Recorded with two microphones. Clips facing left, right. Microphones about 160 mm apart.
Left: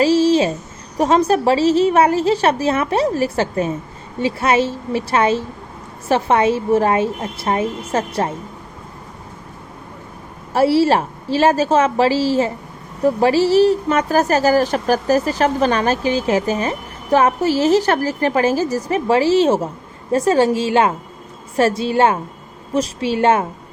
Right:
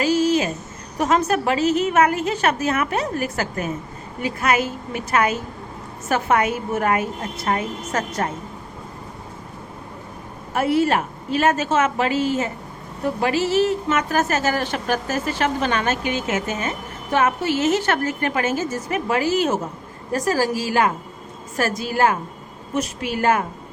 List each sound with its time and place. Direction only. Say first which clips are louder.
0.0 s vehicle: left 5 dB; 30° left (ahead or behind)
0.9 s a woman's voice: left 5 dB; 35° left (ahead or behind)
10.5 s a woman's voice: left 5 dB; 30° left (ahead or behind)